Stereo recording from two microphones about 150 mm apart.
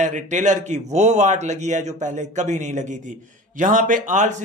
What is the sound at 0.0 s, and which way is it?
A man's voice, 55° right (ahead or behind).